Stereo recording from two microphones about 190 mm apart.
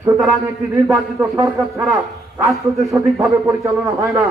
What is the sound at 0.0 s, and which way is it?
Speech, 10° right (ahead or behind).